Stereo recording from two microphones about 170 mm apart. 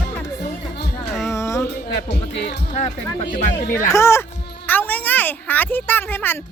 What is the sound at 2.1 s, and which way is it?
Music, 75° left (ahead or behind).